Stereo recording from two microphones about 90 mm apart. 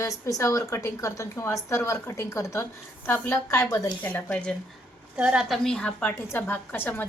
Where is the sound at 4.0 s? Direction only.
20° left (ahead or behind).